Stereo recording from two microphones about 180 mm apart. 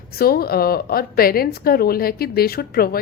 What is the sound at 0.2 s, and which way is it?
A woman's voice, 60° left (ahead or behind).